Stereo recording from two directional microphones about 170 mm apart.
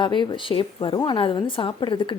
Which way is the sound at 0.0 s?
25° left (ahead or behind).